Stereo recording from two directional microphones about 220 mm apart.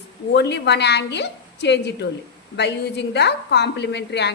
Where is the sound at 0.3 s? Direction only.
50° left (ahead or behind).